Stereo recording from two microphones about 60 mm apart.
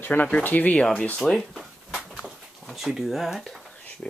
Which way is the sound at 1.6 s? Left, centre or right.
Centre.